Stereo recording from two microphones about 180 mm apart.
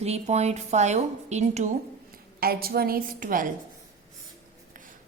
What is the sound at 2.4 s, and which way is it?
A woman's voice, 55° right (ahead or behind).